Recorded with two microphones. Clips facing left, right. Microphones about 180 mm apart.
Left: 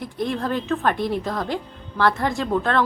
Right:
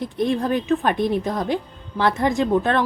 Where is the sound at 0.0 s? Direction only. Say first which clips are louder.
Right 4 dB; 20° right (ahead or behind).